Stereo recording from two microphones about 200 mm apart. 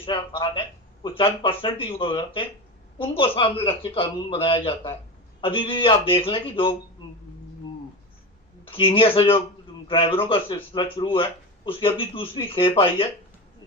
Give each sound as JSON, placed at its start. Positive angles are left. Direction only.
{"t": 0.0, "sound": "speech", "side_deg": 25}
{"t": 8.7, "sound": "speech", "side_deg": 25}